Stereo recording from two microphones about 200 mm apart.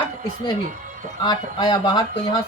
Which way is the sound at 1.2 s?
20° left (ahead or behind).